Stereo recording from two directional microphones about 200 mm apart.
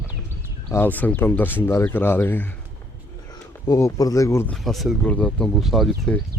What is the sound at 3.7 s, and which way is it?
Speech, 15° left (ahead or behind).